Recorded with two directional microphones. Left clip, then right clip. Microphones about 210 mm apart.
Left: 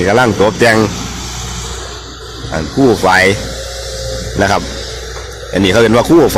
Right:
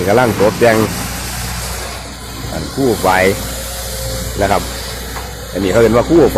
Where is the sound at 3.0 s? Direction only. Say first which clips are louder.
Left 2 dB; 25° left (ahead or behind).